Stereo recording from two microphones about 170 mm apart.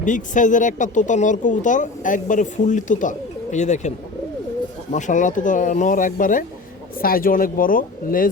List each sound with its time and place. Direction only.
0.0 s speech: 50° left (ahead or behind)